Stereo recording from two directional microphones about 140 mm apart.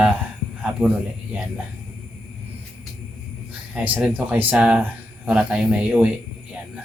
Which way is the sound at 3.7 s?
10° right (ahead or behind).